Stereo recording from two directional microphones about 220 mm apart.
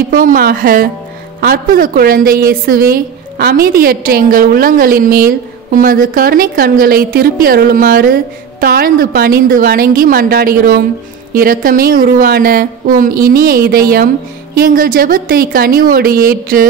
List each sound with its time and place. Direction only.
0.1 s a woman's voice: 40° right (ahead or behind)